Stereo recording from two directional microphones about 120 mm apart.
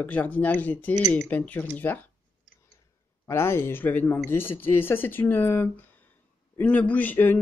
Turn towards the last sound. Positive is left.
turn(degrees=15)  # may be behind; listen again after turning